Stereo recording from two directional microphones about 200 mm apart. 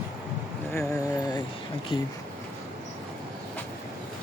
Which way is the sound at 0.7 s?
15° left (ahead or behind).